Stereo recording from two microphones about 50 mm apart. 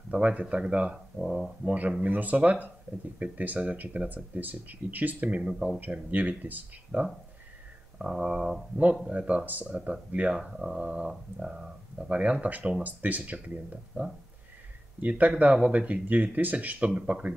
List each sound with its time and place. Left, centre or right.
0.1 s speech: right
1.1 s speech: centre
1.7 s speech: right
5.4 s speech: centre
5.9 s speech: right
8.0 s speech: centre
9.0 s speech: right
10.3 s speech: centre
12.2 s speech: right